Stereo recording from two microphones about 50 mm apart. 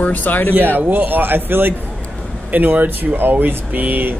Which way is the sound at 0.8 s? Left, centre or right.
Right.